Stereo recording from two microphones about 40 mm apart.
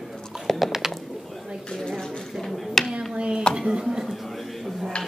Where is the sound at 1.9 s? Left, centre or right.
Centre.